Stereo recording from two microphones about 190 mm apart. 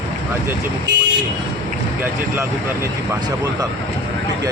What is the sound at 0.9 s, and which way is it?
Speech, 60° right (ahead or behind).